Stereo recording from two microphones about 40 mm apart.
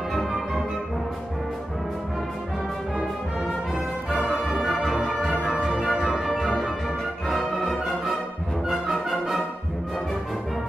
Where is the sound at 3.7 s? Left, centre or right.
Centre.